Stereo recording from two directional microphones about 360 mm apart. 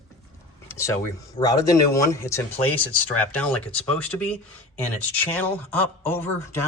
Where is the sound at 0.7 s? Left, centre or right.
Centre.